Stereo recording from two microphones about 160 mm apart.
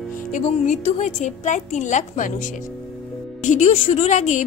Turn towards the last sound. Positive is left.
turn(degrees=50)  # may be behind; listen again after turning